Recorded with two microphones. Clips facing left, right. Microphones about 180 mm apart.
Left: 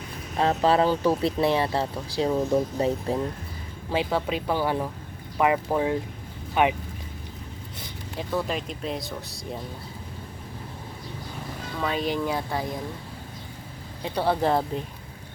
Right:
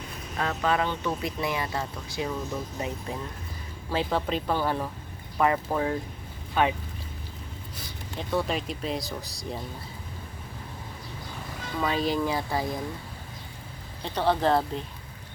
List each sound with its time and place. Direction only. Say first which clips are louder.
0.3 s speech: left 6 dB; 30° left (ahead or behind)
3.9 s speech: left 2 dB; 10° left (ahead or behind)
8.3 s speech: right 1 dB; centre (ahead or behind)
11.8 s speech: even; centre (ahead or behind)
14.0 s speech: left 1 dB; 10° left (ahead or behind)